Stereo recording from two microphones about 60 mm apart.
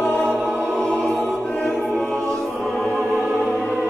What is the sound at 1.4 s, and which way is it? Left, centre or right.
Music, centre.